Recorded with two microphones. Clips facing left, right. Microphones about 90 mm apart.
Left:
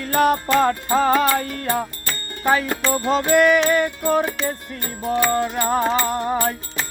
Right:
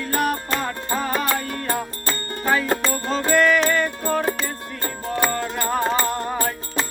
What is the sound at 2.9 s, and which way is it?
Music, 20° left (ahead or behind).